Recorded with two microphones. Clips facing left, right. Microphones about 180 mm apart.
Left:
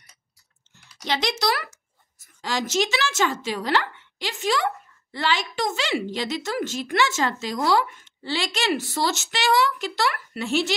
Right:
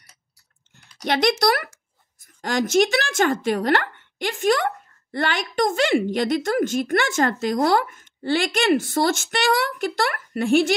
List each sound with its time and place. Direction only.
1.0 s a woman's voice: 55° right (ahead or behind)